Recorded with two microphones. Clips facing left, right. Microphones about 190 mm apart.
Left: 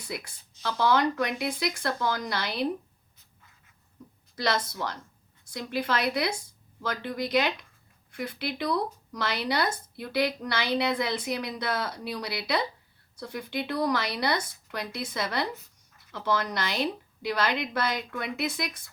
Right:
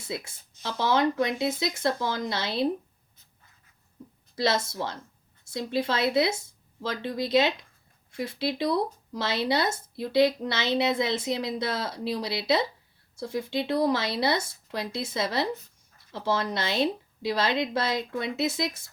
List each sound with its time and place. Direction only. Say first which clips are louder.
0.0 s speech: right 2 dB; 25° right (ahead or behind)
4.0 s a sound: right 2 dB; 30° right (ahead or behind)
4.4 s speech: right 2 dB; 25° right (ahead or behind)